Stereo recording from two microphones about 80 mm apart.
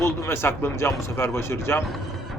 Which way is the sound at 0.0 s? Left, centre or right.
Left.